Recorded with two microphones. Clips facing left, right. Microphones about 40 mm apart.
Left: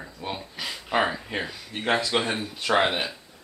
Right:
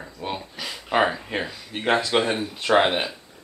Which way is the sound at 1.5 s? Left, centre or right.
Centre.